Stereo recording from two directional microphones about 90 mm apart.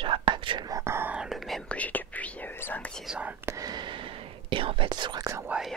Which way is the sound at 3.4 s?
35° right (ahead or behind).